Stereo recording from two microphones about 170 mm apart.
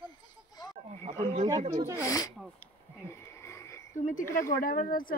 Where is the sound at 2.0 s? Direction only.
20° left (ahead or behind).